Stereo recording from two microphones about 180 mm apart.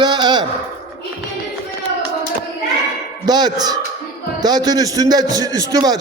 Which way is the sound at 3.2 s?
20° right (ahead or behind).